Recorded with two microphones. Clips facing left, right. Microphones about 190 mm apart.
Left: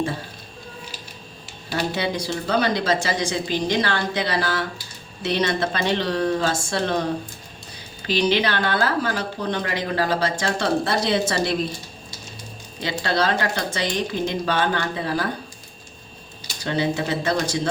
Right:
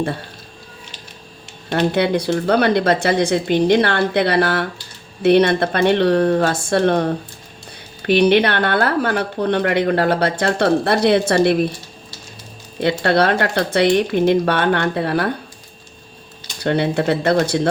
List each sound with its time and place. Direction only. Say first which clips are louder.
1.7 s speech: right 8 dB; 60° right (ahead or behind)
12.8 s speech: right 7 dB; 60° right (ahead or behind)
16.6 s speech: right 6 dB; 60° right (ahead or behind)